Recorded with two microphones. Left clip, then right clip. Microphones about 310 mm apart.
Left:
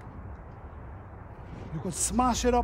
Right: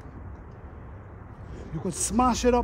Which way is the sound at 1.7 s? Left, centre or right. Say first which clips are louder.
Right 3 dB; centre.